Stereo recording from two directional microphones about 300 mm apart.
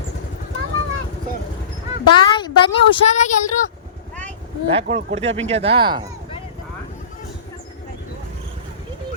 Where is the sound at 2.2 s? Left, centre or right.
Centre.